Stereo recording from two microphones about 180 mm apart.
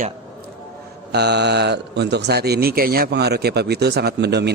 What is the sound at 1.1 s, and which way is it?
Speech, 70° right (ahead or behind).